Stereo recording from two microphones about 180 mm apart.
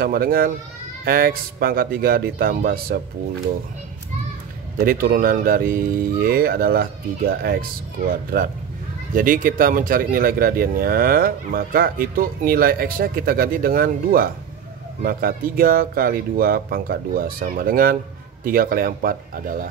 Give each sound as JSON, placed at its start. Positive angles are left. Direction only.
{"t": 0.0, "sound": "speech", "side_deg": -55}
{"t": 4.7, "sound": "speech", "side_deg": -55}
{"t": 9.1, "sound": "a man's voice", "side_deg": -50}